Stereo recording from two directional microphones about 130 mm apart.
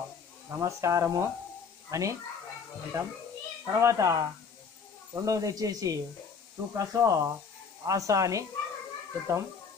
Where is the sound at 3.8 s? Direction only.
25° right (ahead or behind).